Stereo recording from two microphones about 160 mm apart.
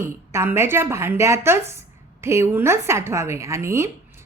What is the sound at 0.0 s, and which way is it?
A woman's voice, 15° right (ahead or behind).